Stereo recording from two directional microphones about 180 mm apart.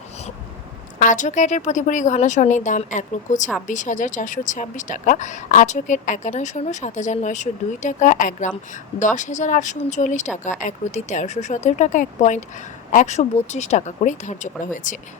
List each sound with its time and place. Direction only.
0.9 s speech: 45° left (ahead or behind)